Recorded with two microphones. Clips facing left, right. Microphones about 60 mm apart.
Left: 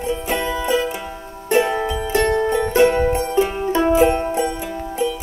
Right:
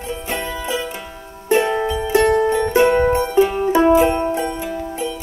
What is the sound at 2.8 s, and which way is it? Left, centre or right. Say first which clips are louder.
Music: even; centre.